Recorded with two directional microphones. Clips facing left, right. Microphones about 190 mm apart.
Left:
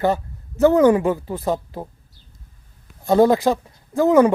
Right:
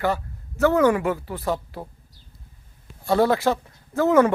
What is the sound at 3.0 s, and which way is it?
Speech, 20° left (ahead or behind).